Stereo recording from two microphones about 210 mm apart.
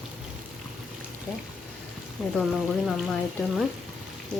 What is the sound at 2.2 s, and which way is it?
Speech, centre (ahead or behind).